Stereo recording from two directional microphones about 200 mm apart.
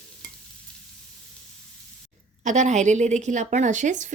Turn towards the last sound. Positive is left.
turn(degrees=-40)  # may be behind; listen again after turning